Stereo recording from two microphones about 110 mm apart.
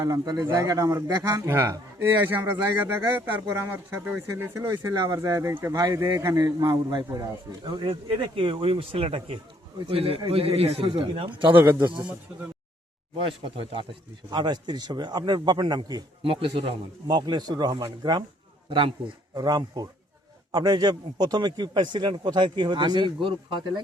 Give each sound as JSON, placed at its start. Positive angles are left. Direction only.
{"t": 0.0, "sound": "a man's voice", "side_deg": -35}
{"t": 4.9, "sound": "a man's voice", "side_deg": -35}
{"t": 7.6, "sound": "a man's voice", "side_deg": -45}
{"t": 11.5, "sound": "speech", "side_deg": -20}
{"t": 14.3, "sound": "a man's voice", "side_deg": -40}
{"t": 16.2, "sound": "a man's voice", "side_deg": -55}
{"t": 17.1, "sound": "a man's voice", "side_deg": -40}
{"t": 19.3, "sound": "a man's voice", "side_deg": -40}